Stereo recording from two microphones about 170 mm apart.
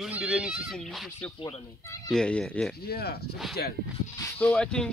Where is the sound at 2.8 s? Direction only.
65° left (ahead or behind).